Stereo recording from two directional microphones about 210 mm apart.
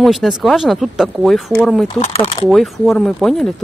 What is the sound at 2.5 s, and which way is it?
Speech, centre (ahead or behind).